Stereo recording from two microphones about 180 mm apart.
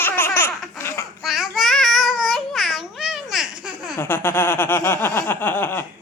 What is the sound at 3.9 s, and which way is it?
Snicker, 15° left (ahead or behind).